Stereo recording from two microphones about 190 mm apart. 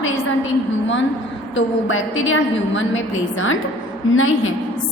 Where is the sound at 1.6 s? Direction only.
90° left.